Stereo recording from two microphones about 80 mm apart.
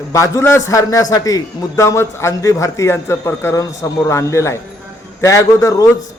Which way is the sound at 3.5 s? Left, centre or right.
Left.